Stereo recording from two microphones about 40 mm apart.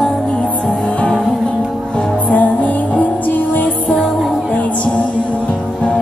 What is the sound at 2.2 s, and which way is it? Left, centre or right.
Music, left.